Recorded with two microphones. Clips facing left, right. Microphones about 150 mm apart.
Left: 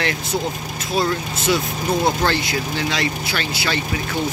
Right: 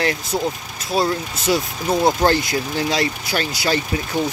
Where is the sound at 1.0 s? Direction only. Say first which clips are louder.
Right 1 dB; 35° right (ahead or behind).